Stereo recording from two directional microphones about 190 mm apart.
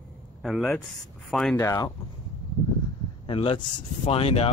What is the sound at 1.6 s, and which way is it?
Speech, 15° left (ahead or behind).